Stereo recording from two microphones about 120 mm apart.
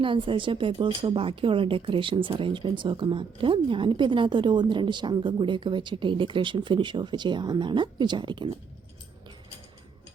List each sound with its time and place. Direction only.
0.0 s speech: 45° right (ahead or behind)